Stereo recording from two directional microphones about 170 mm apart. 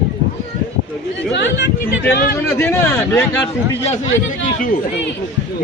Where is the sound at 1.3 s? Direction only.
90° left.